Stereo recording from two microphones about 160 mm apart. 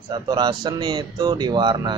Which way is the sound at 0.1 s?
25° right (ahead or behind).